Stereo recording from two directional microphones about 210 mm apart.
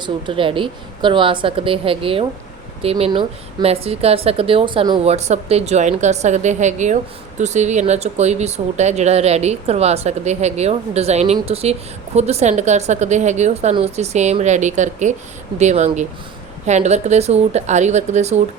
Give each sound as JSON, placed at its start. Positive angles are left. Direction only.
{"t": 0.0, "sound": "a woman's voice", "side_deg": -25}